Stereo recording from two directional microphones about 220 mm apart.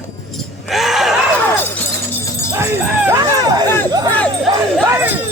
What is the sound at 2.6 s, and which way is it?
Speech, 10° right (ahead or behind).